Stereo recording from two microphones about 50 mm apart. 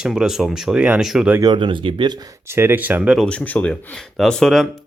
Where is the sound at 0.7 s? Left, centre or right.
Right.